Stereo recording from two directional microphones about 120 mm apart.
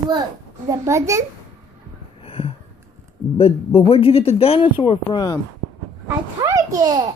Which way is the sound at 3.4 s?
55° left (ahead or behind).